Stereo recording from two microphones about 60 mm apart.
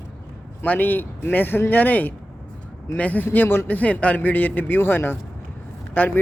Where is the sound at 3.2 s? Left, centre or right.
Left.